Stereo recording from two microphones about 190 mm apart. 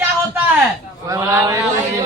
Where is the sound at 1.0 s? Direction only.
15° right (ahead or behind).